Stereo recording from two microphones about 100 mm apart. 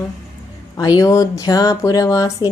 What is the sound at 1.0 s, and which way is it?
Speech, 35° left (ahead or behind).